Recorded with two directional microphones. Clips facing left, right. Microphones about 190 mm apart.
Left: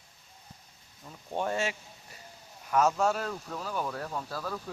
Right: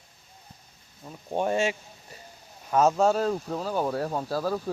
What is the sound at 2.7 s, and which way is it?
Speech, 30° right (ahead or behind).